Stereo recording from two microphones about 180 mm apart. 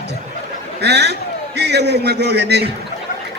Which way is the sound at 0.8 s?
70° right (ahead or behind).